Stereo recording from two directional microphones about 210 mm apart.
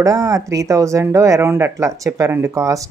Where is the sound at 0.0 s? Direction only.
15° right (ahead or behind).